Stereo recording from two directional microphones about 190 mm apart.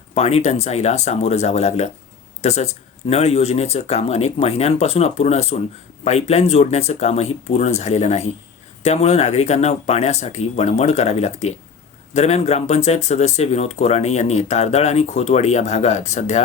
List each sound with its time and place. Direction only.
0.1 s speech: 35° left (ahead or behind)